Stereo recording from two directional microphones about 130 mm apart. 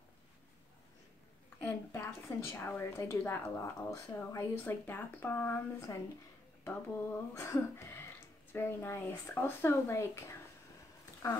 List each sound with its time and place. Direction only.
1.6 s a woman's voice: 15° left (ahead or behind)